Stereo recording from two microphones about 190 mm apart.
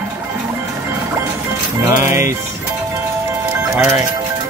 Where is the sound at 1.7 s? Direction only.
15° right (ahead or behind).